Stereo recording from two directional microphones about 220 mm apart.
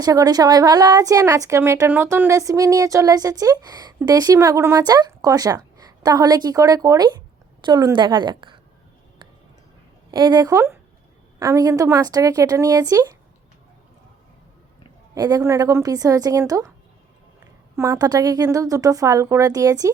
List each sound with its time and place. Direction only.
0.0 s a woman's voice: 15° right (ahead or behind)
10.1 s a woman's voice: 20° right (ahead or behind)
15.1 s a woman's voice: 15° right (ahead or behind)
17.7 s a woman's voice: 15° right (ahead or behind)